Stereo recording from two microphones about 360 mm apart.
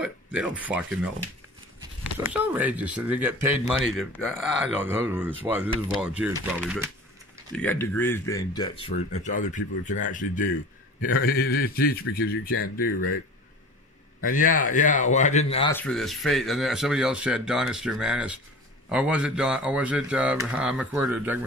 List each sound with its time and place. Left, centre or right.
0.0 s speech: centre
2.1 s speech: centre; by 13.1 s left
14.2 s speech: left
15.7 s speech: centre